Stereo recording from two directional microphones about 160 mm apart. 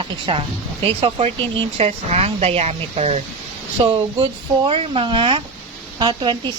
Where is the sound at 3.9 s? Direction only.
30° right (ahead or behind).